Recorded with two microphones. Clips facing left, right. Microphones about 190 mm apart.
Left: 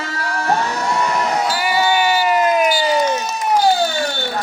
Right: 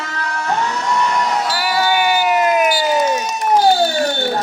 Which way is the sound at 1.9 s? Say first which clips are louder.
Right 2 dB; 5° right (ahead or behind).